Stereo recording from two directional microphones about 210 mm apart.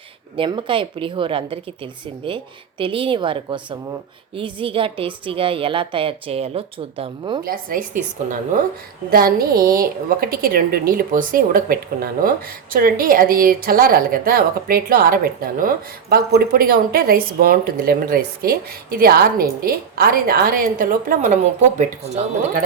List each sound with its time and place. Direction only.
0.3 s speech: 25° right (ahead or behind)
7.4 s a woman's voice: 45° right (ahead or behind)
9.0 s a woman's voice: 45° right (ahead or behind)